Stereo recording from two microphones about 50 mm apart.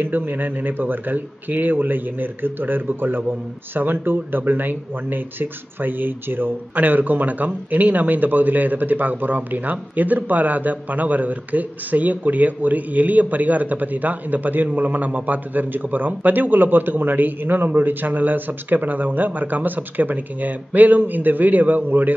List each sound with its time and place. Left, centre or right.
0.0 s speech: right